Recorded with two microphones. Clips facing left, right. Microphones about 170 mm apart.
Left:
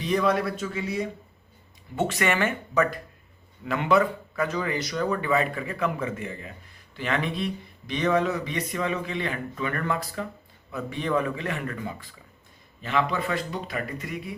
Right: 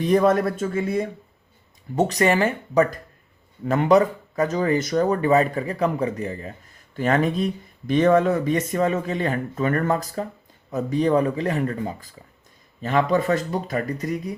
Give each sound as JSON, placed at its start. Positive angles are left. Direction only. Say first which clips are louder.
{"t": 0.0, "sound": "speech", "louder": "right 6 dB", "side_deg": -50}
{"t": 2.0, "sound": "speech", "louder": "right 5 dB", "side_deg": -40}